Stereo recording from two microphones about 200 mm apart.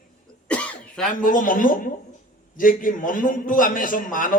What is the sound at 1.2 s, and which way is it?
A man's voice, 45° left (ahead or behind).